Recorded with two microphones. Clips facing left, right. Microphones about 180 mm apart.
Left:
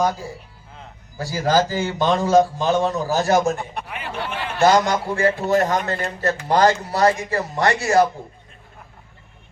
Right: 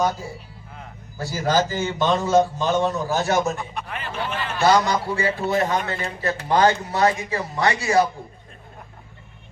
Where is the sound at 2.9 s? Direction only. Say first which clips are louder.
Left 3 dB; 40° left (ahead or behind).